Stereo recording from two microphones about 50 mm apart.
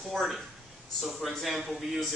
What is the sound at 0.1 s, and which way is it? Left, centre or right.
A man's voice, centre.